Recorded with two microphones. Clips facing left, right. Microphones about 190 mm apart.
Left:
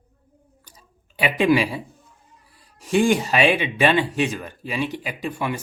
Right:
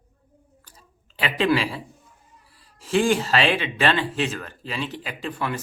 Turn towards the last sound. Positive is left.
turn(degrees=15)  # may be behind; listen again after turning